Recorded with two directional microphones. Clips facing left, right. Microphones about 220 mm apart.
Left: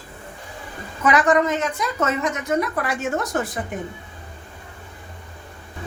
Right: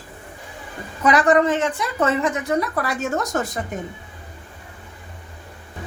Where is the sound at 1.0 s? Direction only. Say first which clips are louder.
Right 2 dB; 35° right (ahead or behind).